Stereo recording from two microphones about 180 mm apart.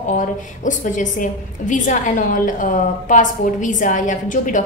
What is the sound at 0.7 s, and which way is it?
A woman's voice, 45° left (ahead or behind).